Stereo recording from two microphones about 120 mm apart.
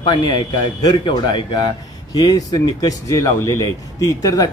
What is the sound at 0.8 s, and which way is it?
A man's voice, 40° left (ahead or behind).